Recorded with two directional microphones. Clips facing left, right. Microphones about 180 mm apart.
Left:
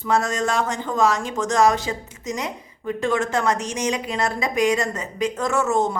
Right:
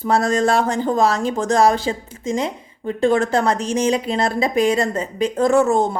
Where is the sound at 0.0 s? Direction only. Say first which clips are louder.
Right 4 dB; 35° right (ahead or behind).